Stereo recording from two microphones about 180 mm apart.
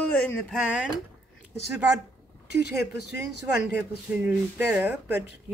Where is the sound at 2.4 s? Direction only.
65° left (ahead or behind).